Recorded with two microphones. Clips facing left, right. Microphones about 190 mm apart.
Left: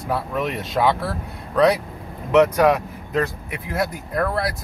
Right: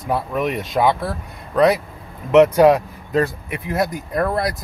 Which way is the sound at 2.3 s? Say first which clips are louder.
Right 4 dB; 25° right (ahead or behind).